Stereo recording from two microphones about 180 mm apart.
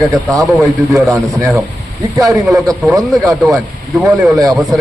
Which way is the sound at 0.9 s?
15° right (ahead or behind).